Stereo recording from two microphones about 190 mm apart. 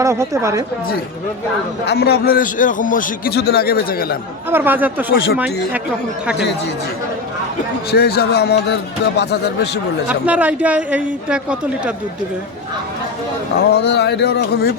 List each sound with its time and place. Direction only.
0.0 s a man's voice: 15° right (ahead or behind)
1.9 s a man's voice: 60° left (ahead or behind)
4.5 s a man's voice: 10° right (ahead or behind)
7.9 s speech: 55° left (ahead or behind)
10.1 s a man's voice: 10° right (ahead or behind)
13.7 s speech: 60° left (ahead or behind)